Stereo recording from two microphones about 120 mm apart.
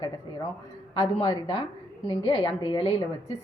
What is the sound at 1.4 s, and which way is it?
A woman's voice, 45° left (ahead or behind).